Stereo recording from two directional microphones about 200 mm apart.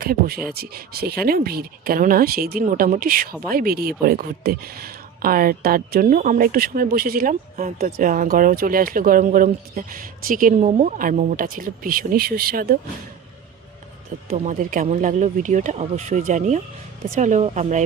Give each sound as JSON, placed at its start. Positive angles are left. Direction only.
{"t": 0.0, "sound": "speech", "side_deg": -45}
{"t": 14.3, "sound": "speech", "side_deg": -40}